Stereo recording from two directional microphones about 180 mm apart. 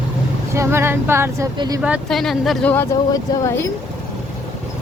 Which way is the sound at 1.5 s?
20° right (ahead or behind).